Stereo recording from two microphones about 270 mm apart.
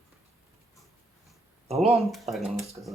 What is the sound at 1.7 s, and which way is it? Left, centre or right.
Speech, centre.